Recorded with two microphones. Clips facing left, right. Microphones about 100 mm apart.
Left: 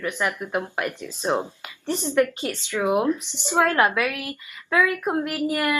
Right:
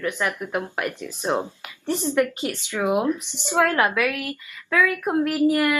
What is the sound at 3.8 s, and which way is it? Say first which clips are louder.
Speech: even; 20° left (ahead or behind).